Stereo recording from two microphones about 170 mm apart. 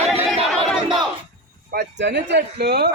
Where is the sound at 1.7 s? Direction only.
80° right.